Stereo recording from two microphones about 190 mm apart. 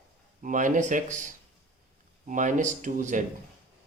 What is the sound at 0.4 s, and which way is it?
Speech, 45° right (ahead or behind).